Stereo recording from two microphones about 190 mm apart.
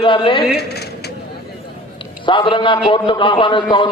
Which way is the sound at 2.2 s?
25° left (ahead or behind).